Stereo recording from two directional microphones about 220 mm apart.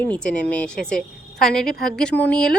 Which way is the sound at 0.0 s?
5° left (ahead or behind).